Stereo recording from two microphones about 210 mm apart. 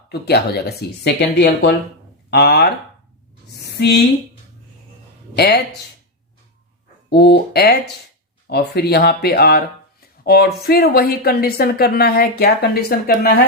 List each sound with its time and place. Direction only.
0.1 s speech: 50° left (ahead or behind)
3.5 s a sound: 50° left (ahead or behind)
5.4 s speech: 50° left (ahead or behind)
7.1 s speech: 50° left (ahead or behind)